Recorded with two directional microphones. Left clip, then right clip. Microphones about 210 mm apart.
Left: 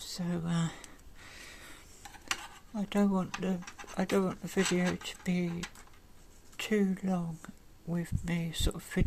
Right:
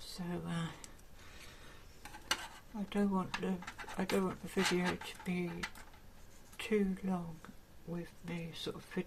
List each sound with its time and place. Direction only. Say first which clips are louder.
0.0 s speech: left 5 dB; 30° left (ahead or behind)
2.7 s speech: left 5 dB; 35° left (ahead or behind)
6.6 s speech: left 4 dB; 30° left (ahead or behind)